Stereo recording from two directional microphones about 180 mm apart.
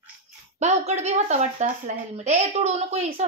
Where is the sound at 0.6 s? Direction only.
40° right (ahead or behind).